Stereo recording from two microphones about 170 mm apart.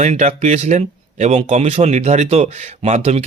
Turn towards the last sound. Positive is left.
turn(degrees=-40)  # may be behind; listen again after turning